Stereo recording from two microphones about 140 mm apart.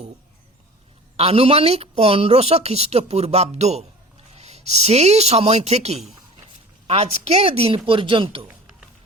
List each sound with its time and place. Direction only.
1.1 s speech: 45° right (ahead or behind)